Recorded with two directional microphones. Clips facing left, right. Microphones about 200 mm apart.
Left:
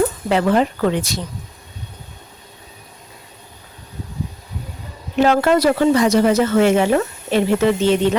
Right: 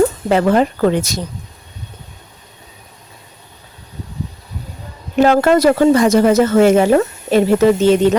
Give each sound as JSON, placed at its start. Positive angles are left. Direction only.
{"t": 0.3, "sound": "speech", "side_deg": -45}
{"t": 5.1, "sound": "speech", "side_deg": -45}